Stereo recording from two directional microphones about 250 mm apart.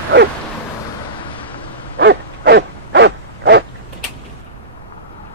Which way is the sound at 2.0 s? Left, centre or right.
Right.